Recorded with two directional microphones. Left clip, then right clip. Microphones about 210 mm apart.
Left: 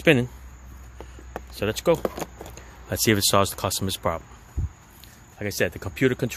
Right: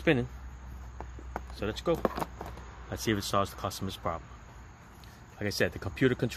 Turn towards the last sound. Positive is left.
turn(degrees=25)  # may be behind; listen again after turning